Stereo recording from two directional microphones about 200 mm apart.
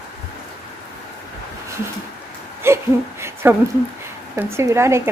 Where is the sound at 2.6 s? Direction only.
10° right (ahead or behind).